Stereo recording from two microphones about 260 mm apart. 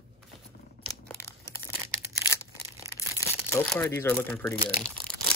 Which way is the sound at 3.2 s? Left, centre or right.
Centre.